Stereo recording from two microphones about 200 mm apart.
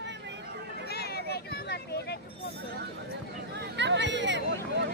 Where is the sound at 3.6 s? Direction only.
60° right (ahead or behind).